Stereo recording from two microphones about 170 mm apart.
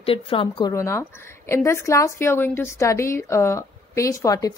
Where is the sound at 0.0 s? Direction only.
30° left (ahead or behind).